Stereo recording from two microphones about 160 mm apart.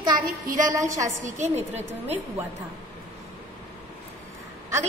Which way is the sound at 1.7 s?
10° right (ahead or behind).